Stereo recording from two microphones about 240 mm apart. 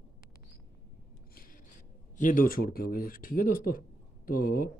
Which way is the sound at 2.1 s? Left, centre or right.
Left.